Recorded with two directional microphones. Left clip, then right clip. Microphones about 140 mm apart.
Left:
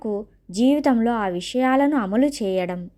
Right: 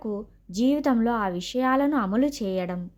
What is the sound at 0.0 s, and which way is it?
A woman's voice, 15° left (ahead or behind).